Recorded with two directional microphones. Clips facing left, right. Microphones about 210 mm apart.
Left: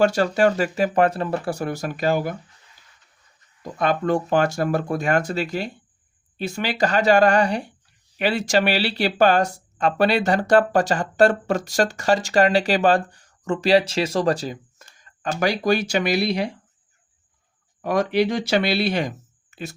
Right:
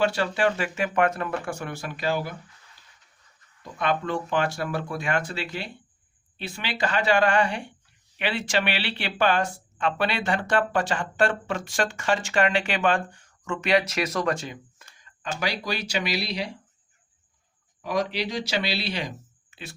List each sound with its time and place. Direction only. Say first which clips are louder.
0.0 s speech: left 6 dB; 40° left (ahead or behind)
3.6 s speech: left 4 dB; 40° left (ahead or behind)
17.8 s speech: left 7 dB; 55° left (ahead or behind)